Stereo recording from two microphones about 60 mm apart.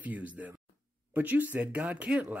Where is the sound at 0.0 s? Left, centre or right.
Right.